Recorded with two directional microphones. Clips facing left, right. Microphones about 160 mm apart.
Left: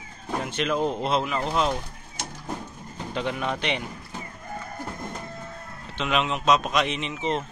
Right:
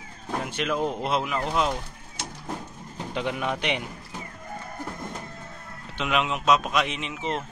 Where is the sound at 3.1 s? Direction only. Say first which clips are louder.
Even; 10° right (ahead or behind).